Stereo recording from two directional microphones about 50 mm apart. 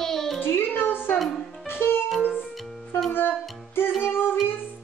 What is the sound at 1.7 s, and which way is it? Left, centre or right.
Music, left.